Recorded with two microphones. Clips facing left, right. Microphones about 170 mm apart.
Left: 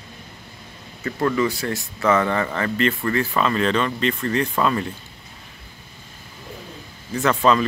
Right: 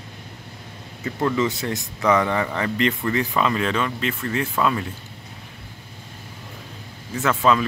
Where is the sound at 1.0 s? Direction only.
20° right (ahead or behind); by 4.8 s 5° right (ahead or behind).